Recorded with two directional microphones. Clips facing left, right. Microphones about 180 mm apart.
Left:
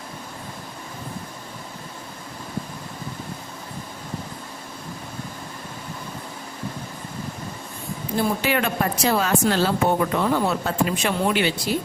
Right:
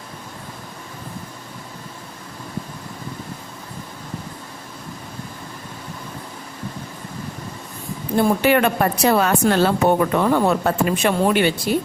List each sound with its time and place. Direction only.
8.1 s speech: 55° right (ahead or behind)